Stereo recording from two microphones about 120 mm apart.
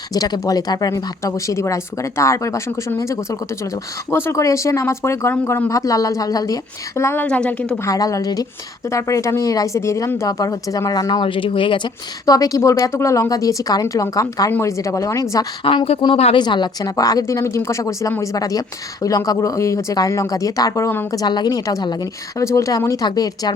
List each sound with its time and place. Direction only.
0.1 s speech: 30° left (ahead or behind)
7.3 s a woman's voice: 10° left (ahead or behind)
7.9 s a woman's voice: 30° left (ahead or behind); by 11.9 s 45° left (ahead or behind)
12.2 s speech: 30° left (ahead or behind)
15.6 s speech: 50° left (ahead or behind)
16.1 s speech: 55° left (ahead or behind)
16.4 s speech: 40° left (ahead or behind); by 21.1 s 20° left (ahead or behind)
21.1 s a woman's voice: 35° left (ahead or behind)